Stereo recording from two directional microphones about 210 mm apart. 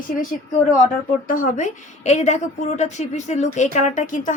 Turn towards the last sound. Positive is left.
turn(degrees=40)  # may be behind; listen again after turning